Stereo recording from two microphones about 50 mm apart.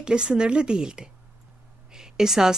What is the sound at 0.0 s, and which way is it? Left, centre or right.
A woman's voice, centre.